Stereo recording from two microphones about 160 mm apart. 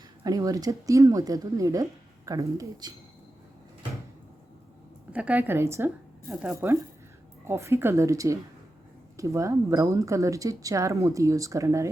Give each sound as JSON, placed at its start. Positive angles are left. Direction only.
{"t": 0.3, "sound": "speech", "side_deg": -20}
{"t": 5.1, "sound": "speech", "side_deg": -10}